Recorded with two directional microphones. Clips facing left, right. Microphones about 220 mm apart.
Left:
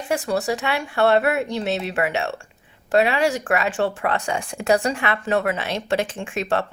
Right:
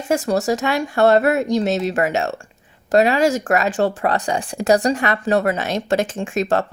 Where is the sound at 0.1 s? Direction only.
45° right (ahead or behind).